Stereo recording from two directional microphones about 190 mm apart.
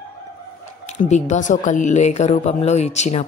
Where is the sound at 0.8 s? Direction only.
40° left (ahead or behind).